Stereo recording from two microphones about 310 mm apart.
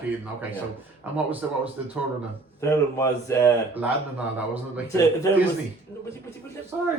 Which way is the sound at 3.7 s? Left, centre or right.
Centre.